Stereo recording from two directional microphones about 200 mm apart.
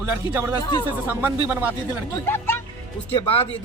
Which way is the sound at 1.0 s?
10° right (ahead or behind).